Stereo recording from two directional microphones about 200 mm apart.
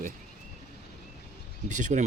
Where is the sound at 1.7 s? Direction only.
40° right (ahead or behind).